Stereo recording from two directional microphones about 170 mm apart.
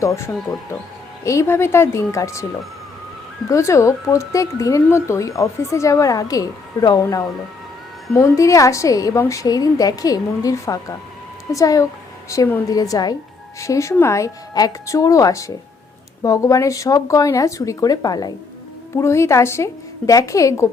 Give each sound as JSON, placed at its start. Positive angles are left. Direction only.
{"t": 0.0, "sound": "a woman's voice", "side_deg": 20}
{"t": 3.5, "sound": "a woman's voice", "side_deg": 15}